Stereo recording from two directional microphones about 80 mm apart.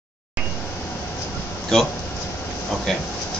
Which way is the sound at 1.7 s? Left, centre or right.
Centre.